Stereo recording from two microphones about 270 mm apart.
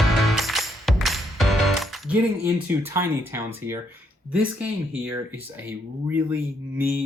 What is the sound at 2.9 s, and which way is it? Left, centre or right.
Speech, centre.